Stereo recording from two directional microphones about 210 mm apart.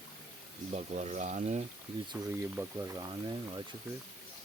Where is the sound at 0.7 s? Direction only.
30° right (ahead or behind).